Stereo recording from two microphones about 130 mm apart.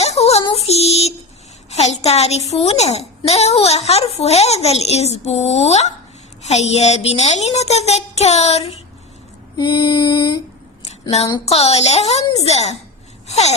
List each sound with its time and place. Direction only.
0.0 s child singing: 55° left (ahead or behind)
0.5 s music: 55° left (ahead or behind)
1.7 s speech: 55° left (ahead or behind)
9.6 s female singing: 40° left (ahead or behind)
11.4 s speech: 55° left (ahead or behind)
13.2 s wail: 60° left (ahead or behind)